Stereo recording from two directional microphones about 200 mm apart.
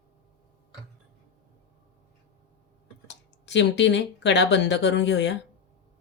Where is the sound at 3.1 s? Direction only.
60° left (ahead or behind).